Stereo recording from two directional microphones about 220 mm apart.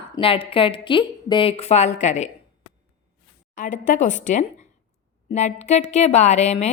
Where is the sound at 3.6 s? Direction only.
35° left (ahead or behind).